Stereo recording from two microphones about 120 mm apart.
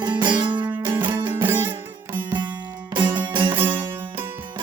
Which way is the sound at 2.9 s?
40° right (ahead or behind).